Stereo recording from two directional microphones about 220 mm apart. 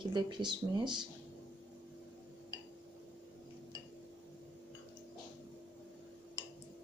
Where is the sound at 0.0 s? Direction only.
20° right (ahead or behind).